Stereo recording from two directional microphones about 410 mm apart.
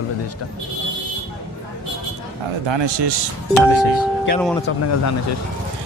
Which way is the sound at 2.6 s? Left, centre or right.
Right.